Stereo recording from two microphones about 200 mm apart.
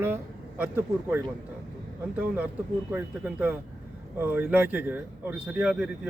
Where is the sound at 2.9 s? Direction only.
10° right (ahead or behind).